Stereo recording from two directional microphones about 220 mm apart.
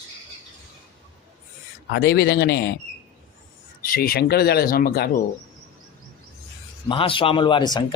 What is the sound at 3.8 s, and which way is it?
Speech, 40° left (ahead or behind).